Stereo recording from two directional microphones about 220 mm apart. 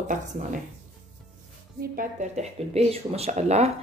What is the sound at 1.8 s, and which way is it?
Speech, 35° right (ahead or behind).